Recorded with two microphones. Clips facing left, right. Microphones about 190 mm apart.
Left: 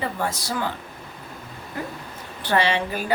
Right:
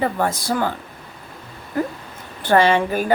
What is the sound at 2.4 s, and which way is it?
Speech, 50° right (ahead or behind).